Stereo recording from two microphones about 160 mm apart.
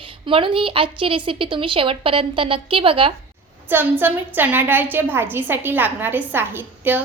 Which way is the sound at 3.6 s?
10° right (ahead or behind).